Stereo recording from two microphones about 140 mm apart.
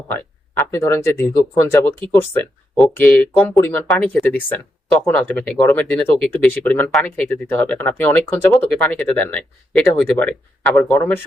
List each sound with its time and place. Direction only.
0.1 s speech: 15° left (ahead or behind)
8.8 s speech: 10° left (ahead or behind)